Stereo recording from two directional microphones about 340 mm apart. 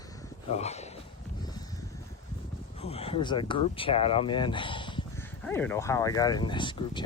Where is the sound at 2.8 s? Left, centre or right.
Centre.